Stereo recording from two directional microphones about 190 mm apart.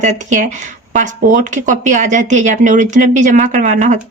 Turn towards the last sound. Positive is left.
turn(degrees=-40)  # may be behind; listen again after turning